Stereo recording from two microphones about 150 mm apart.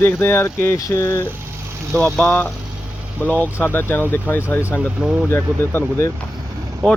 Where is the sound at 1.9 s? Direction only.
Centre (ahead or behind).